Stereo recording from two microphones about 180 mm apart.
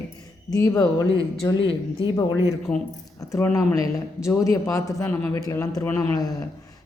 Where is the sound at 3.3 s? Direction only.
15° left (ahead or behind).